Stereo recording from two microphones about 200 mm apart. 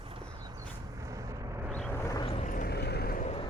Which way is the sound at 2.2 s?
30° left (ahead or behind).